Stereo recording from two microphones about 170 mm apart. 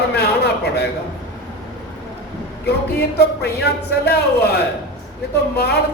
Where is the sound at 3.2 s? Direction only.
70° left (ahead or behind).